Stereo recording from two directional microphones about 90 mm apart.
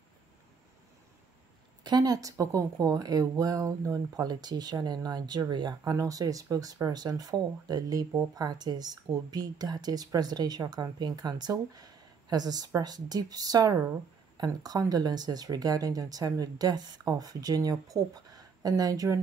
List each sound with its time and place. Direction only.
1.8 s speech: 50° right (ahead or behind)